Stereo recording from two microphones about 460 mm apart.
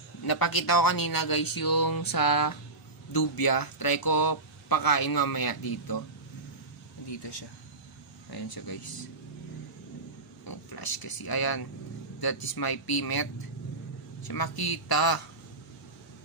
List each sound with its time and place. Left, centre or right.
0.2 s speech: left
8.3 s speech: left
10.4 s speech: left